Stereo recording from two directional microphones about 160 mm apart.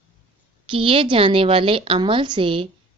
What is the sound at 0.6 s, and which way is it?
A woman's voice, 35° right (ahead or behind).